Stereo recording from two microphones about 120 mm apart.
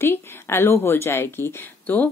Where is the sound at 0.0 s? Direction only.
20° left (ahead or behind).